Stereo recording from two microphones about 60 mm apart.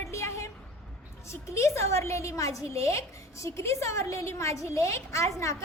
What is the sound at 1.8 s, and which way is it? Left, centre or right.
A woman's voice, left.